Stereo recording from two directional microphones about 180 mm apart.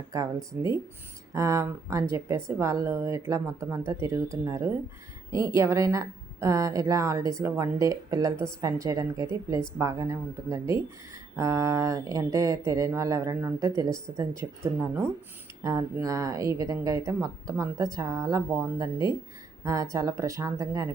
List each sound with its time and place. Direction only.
0.1 s speech: 20° right (ahead or behind)